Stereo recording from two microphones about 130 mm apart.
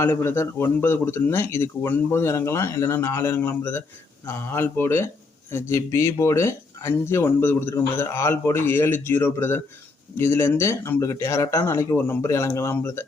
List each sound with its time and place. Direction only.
0.0 s speech: 20° left (ahead or behind)